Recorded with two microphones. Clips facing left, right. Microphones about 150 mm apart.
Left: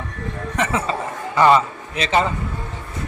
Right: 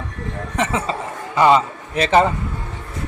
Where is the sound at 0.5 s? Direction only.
25° right (ahead or behind).